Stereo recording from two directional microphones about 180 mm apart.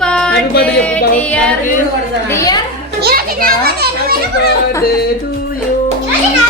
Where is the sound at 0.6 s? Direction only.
5° left (ahead or behind).